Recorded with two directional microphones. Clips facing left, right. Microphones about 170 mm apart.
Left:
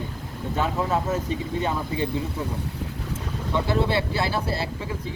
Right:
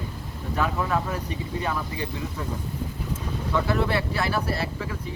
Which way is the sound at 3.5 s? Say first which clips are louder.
Left 1 dB; 25° left (ahead or behind).